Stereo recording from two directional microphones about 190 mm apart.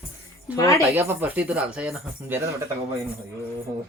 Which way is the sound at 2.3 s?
15° right (ahead or behind).